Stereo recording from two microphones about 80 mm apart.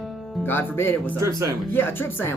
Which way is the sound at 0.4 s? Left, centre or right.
Left.